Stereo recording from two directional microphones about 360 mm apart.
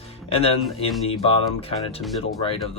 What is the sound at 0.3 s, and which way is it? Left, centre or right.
Speech, centre.